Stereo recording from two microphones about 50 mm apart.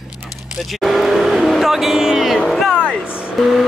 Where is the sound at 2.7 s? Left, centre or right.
Left.